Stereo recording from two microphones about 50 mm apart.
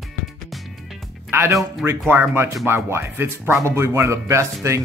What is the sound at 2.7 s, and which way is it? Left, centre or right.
Speech, right.